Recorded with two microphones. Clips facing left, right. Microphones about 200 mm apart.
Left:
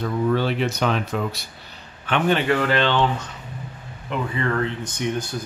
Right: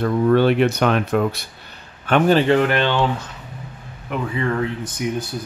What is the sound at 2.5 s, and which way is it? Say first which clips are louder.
Speech: right 3 dB; 15° right (ahead or behind).